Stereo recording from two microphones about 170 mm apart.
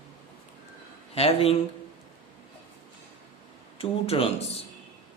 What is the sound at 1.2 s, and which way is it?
Speech, 35° left (ahead or behind).